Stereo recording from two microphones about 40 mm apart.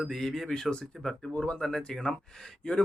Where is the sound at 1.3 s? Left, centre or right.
Left.